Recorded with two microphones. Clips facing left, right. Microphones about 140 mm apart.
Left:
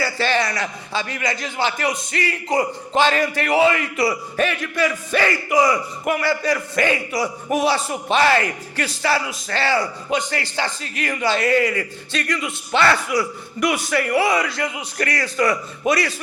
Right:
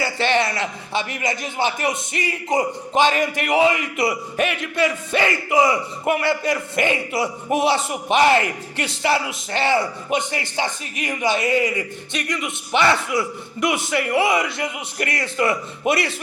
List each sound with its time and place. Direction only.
0.0 s a man's voice: 20° right (ahead or behind)